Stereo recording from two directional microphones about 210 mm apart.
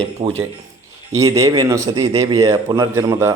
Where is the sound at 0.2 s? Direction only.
30° right (ahead or behind).